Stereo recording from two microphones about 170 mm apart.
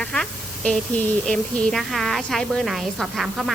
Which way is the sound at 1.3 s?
5° left (ahead or behind).